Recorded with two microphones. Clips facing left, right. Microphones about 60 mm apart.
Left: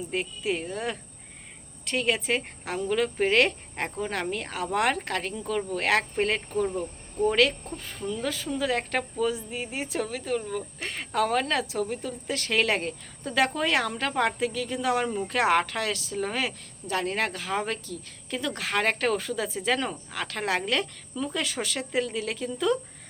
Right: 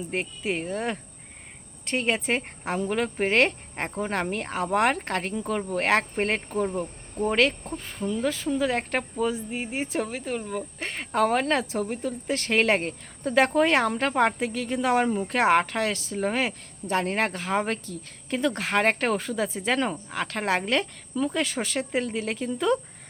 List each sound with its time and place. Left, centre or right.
0.0 s speech: right